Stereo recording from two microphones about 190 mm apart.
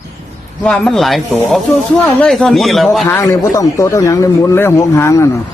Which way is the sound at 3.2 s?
15° left (ahead or behind).